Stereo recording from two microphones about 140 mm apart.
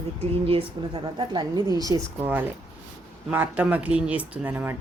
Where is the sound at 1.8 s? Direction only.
25° right (ahead or behind).